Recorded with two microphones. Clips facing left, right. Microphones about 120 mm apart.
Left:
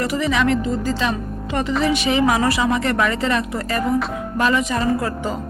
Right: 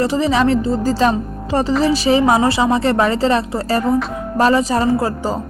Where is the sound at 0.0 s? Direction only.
30° right (ahead or behind).